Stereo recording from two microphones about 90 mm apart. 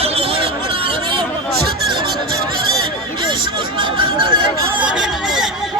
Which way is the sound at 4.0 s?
65° right (ahead or behind).